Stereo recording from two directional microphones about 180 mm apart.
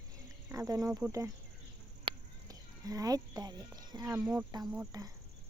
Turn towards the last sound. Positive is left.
turn(degrees=-5)  # may be behind; listen again after turning